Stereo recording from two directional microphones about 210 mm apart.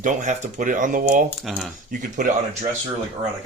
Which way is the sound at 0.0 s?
35° right (ahead or behind).